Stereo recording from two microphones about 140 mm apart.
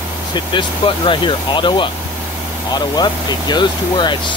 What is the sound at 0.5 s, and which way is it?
Speech, 35° left (ahead or behind).